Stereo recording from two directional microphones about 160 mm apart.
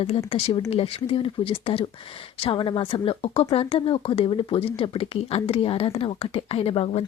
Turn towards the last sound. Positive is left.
turn(degrees=35)  # may be behind; listen again after turning